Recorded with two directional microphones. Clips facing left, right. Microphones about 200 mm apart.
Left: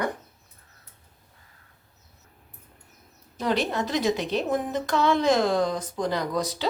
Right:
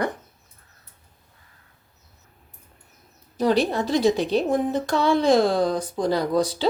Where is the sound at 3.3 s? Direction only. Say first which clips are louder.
Right 5 dB; 35° right (ahead or behind).